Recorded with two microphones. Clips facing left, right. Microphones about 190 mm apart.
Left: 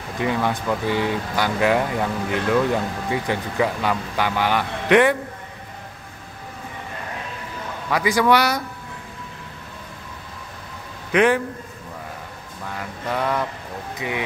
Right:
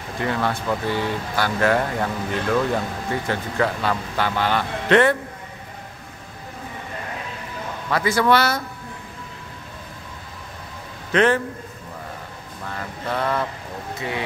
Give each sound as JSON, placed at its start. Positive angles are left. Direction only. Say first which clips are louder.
{"t": 0.2, "sound": "speech", "louder": "left 1 dB", "side_deg": 15}
{"t": 7.9, "sound": "speech", "louder": "left 1 dB", "side_deg": 10}
{"t": 11.1, "sound": "a man's voice", "louder": "left 1 dB", "side_deg": 10}
{"t": 12.6, "sound": "speech", "louder": "even", "side_deg": 10}